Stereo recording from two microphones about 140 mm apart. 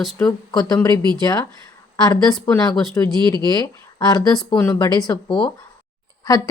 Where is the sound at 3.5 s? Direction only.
30° left (ahead or behind).